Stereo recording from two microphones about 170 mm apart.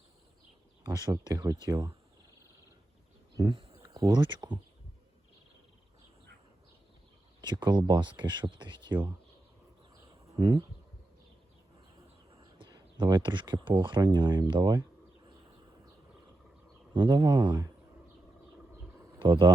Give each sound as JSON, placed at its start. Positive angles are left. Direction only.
{"t": 0.9, "sound": "speech", "side_deg": -20}
{"t": 3.3, "sound": "speech", "side_deg": -25}
{"t": 7.4, "sound": "speech", "side_deg": -25}
{"t": 12.4, "sound": "speech", "side_deg": -25}
{"t": 16.9, "sound": "speech", "side_deg": -25}
{"t": 19.2, "sound": "speech", "side_deg": -25}